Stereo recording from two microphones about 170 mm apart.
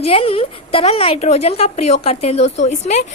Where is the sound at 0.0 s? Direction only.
35° left (ahead or behind).